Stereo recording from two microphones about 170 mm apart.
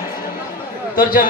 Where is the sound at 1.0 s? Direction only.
55° left (ahead or behind).